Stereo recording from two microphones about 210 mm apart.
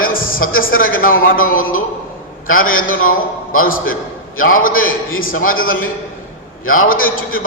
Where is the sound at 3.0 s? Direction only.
40° left (ahead or behind).